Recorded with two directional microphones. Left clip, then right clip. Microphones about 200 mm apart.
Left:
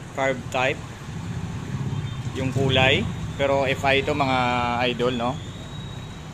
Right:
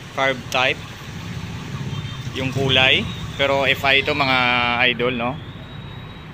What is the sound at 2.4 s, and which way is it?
Speech, centre (ahead or behind).